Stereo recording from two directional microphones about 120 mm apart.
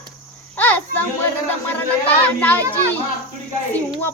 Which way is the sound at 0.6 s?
15° left (ahead or behind).